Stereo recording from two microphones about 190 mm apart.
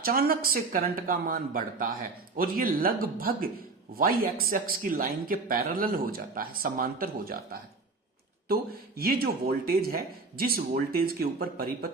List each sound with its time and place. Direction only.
0.0 s speech: 50° right (ahead or behind)
9.0 s speech: 50° right (ahead or behind)